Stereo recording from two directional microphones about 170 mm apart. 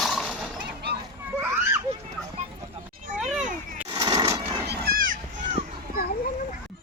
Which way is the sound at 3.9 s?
25° right (ahead or behind).